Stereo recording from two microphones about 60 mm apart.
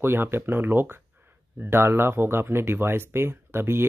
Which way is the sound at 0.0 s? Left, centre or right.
Right.